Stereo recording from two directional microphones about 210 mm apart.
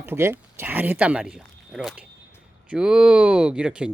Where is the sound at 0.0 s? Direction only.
10° right (ahead or behind).